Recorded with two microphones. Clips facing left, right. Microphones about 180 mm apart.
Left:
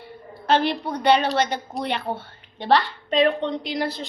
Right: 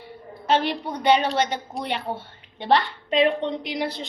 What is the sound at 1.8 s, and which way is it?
Speech, 10° right (ahead or behind).